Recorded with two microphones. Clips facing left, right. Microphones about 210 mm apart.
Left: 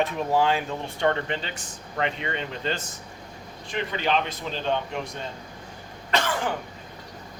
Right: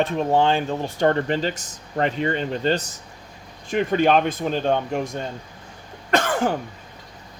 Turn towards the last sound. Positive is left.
turn(degrees=-45)  # may be behind; listen again after turning